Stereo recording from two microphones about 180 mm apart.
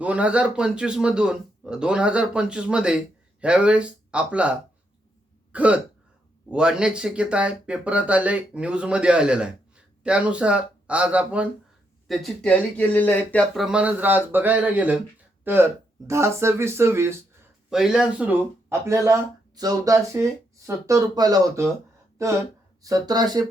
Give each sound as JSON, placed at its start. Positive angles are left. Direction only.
{"t": 0.0, "sound": "a man's voice", "side_deg": -5}
{"t": 5.5, "sound": "throat clearing", "side_deg": -5}
{"t": 6.5, "sound": "a man's voice", "side_deg": -5}
{"t": 17.7, "sound": "speech", "side_deg": -5}